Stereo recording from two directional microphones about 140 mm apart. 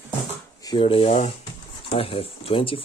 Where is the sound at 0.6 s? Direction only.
35° left (ahead or behind).